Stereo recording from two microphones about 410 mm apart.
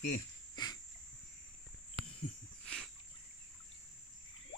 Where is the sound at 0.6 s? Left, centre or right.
Centre.